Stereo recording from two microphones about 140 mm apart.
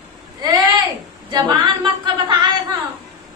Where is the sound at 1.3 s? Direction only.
30° right (ahead or behind).